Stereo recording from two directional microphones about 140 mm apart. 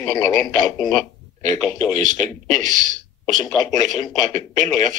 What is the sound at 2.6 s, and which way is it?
Speech, 65° right (ahead or behind).